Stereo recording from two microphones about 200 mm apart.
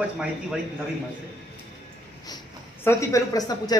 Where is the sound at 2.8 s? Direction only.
15° left (ahead or behind).